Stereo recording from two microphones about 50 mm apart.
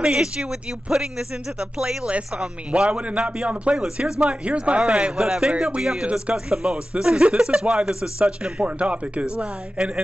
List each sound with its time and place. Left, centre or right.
0.0 s speech: centre
6.0 s speech: right